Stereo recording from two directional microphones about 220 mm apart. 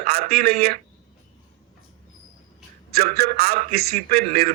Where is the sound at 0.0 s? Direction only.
45° right (ahead or behind).